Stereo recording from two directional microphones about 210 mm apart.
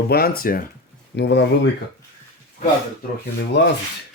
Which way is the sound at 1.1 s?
55° left (ahead or behind).